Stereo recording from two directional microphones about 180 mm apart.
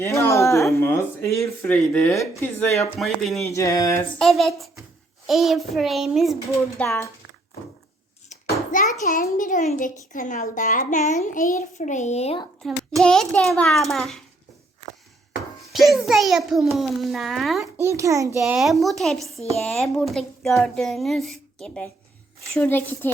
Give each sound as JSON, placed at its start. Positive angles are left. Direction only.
{"t": 0.0, "sound": "speech", "side_deg": 15}
{"t": 3.0, "sound": "speech", "side_deg": 0}
{"t": 3.4, "sound": "speech", "side_deg": 15}
{"t": 4.2, "sound": "speech", "side_deg": 0}
{"t": 6.7, "sound": "speech", "side_deg": 15}
{"t": 8.3, "sound": "a sound", "side_deg": 40}
{"t": 8.7, "sound": "a child's voice", "side_deg": 45}
{"t": 13.0, "sound": "speech", "side_deg": 5}
{"t": 15.7, "sound": "speech", "side_deg": 0}
{"t": 17.7, "sound": "speech", "side_deg": -15}